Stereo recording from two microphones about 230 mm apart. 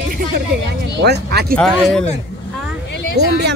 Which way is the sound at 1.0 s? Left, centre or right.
Right.